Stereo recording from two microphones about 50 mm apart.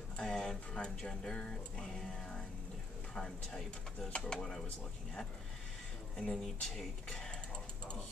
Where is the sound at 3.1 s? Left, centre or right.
Centre.